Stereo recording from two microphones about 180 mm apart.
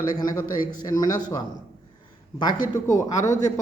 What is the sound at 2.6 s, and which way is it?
Speech, 45° left (ahead or behind).